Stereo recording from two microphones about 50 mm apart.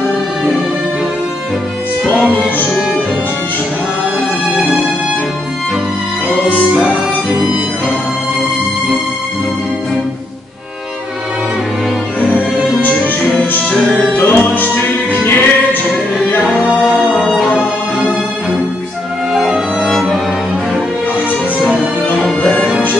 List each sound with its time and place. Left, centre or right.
6.9 s music: centre
12.8 s music: left
19.3 s music: centre
22.2 s music: left